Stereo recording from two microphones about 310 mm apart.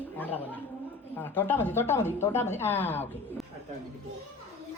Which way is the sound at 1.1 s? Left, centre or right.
Centre.